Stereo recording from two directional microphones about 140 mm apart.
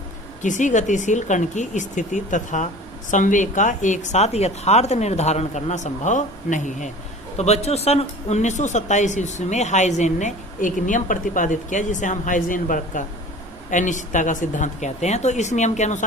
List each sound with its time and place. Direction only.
0.4 s speech: 60° left (ahead or behind)
7.3 s speech: 50° left (ahead or behind)